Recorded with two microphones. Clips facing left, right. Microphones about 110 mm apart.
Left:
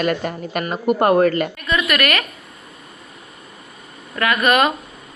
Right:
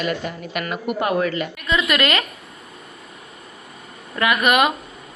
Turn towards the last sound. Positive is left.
turn(degrees=-15)  # may be behind; listen again after turning